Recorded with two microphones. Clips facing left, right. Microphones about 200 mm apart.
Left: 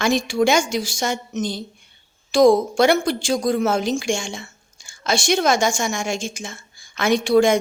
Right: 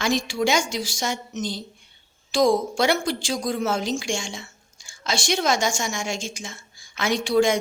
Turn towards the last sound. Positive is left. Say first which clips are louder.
# left 4 dB
turn(degrees=50)  # may be behind; listen again after turning